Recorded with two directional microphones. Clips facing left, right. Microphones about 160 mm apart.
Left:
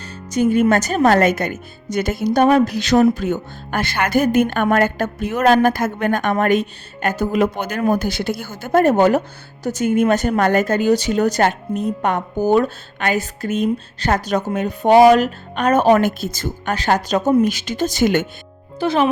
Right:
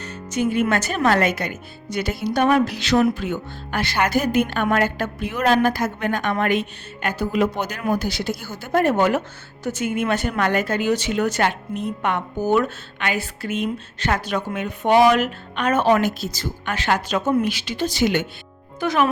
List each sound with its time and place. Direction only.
0.3 s a woman's voice: 40° left (ahead or behind)
18.8 s speech: 30° left (ahead or behind)